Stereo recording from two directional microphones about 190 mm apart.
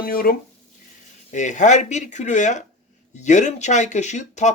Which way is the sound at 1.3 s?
40° left (ahead or behind).